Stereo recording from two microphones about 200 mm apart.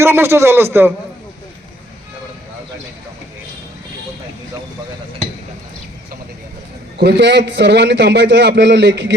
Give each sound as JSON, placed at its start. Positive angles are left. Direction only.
{"t": 0.0, "sound": "a man's voice", "side_deg": -10}
{"t": 7.0, "sound": "a man's voice", "side_deg": -60}